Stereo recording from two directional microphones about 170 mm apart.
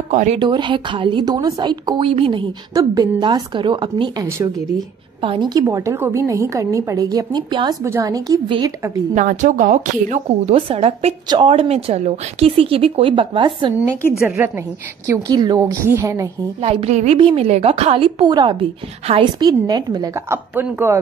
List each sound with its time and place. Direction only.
0.1 s speech: 45° right (ahead or behind)
0.4 s a woman's voice: 25° right (ahead or behind)
2.7 s a woman's voice: 20° right (ahead or behind)
4.3 s a woman's voice: 15° right (ahead or behind)
5.2 s a woman's voice: 30° right (ahead or behind)
9.1 s a woman's voice: 45° right (ahead or behind)
10.5 s a woman's voice: 35° right (ahead or behind)
11.2 s a woman's voice: 25° right (ahead or behind)
11.5 s a woman's voice: 35° right (ahead or behind)
14.2 s a woman's voice: 15° right (ahead or behind)
15.0 s a woman's voice: 25° right (ahead or behind)
16.6 s a woman's voice: 35° right (ahead or behind); by 21.0 s 15° right (ahead or behind)